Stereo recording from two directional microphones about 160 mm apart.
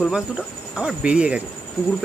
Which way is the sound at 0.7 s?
5° right (ahead or behind).